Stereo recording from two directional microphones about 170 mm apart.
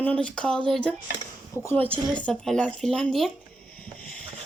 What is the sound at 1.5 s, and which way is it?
Speech, 20° left (ahead or behind).